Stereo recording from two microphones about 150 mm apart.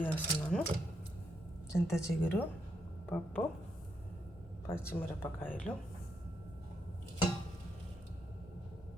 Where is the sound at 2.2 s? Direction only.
10° left (ahead or behind).